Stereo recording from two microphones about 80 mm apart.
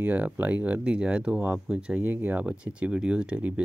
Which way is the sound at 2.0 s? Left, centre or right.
Right.